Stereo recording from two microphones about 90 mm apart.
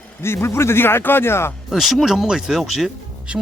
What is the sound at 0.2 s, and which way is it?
Speech, 30° left (ahead or behind).